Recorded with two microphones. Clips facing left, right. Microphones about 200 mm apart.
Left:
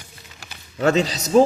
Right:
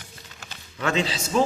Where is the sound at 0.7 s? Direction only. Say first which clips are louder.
Left 6 dB; 40° left (ahead or behind).